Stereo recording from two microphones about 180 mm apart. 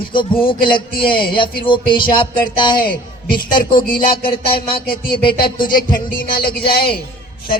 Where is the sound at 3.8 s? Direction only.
50° left (ahead or behind).